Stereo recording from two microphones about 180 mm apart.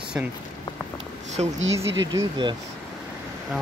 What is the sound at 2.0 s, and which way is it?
Speech, 25° right (ahead or behind).